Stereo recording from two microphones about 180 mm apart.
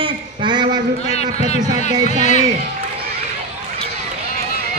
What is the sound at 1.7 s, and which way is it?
Speech, 55° right (ahead or behind).